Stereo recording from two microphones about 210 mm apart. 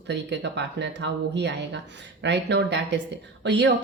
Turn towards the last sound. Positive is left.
turn(degrees=-55)  # may be behind; listen again after turning